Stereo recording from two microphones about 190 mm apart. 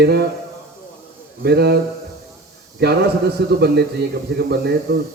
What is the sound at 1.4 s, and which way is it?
Speech, 60° right (ahead or behind).